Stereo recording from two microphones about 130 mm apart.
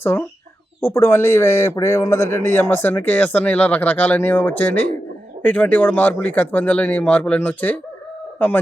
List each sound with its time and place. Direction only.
0.0 s a man's voice: 20° left (ahead or behind)